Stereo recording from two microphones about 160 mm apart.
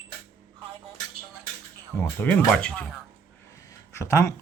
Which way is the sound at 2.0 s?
10° left (ahead or behind).